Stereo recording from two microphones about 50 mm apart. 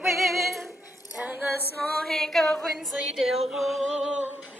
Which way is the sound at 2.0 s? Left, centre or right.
Centre.